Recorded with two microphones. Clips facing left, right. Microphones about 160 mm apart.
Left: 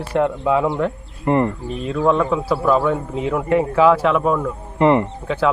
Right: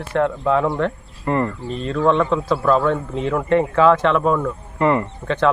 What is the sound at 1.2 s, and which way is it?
Speech, 20° left (ahead or behind).